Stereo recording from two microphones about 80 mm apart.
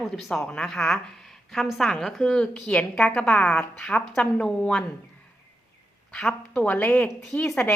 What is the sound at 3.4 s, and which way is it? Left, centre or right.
Speech, left.